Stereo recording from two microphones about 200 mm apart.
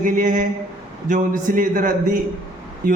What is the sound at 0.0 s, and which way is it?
A man's voice, 40° right (ahead or behind).